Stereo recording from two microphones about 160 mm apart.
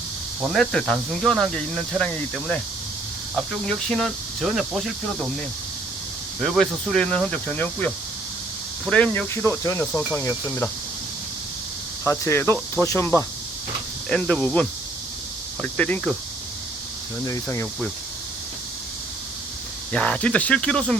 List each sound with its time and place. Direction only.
0.4 s speech: centre (ahead or behind)
3.3 s speech: centre (ahead or behind)
6.4 s speech: centre (ahead or behind)
8.9 s speech: 10° left (ahead or behind)
12.0 s speech: 15° left (ahead or behind)
14.1 s speech: 5° left (ahead or behind)
17.2 s speech: 20° left (ahead or behind)
19.9 s speech: 5° left (ahead or behind)